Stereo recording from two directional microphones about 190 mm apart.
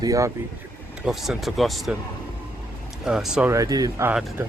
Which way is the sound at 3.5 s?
20° right (ahead or behind).